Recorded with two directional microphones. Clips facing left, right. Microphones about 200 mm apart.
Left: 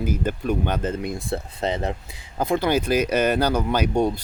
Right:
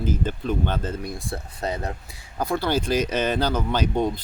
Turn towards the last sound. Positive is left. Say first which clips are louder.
# left 2 dB
turn(degrees=10)  # may be behind; listen again after turning